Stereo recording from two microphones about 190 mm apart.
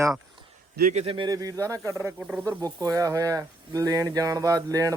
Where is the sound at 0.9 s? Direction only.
30° right (ahead or behind).